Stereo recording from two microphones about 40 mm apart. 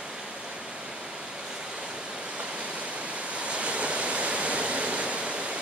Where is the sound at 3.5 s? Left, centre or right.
Right.